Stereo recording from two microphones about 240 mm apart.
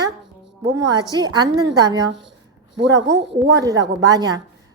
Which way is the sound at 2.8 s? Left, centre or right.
Right.